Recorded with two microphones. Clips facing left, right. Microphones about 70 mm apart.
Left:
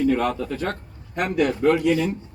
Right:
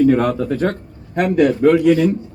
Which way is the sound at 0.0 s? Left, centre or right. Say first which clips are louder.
Right 7 dB; right.